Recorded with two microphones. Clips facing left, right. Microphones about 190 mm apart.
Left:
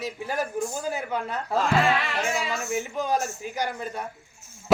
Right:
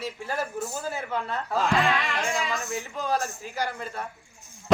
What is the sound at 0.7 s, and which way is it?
Speech, 10° left (ahead or behind).